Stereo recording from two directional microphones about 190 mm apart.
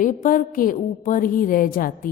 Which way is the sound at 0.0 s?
45° left (ahead or behind).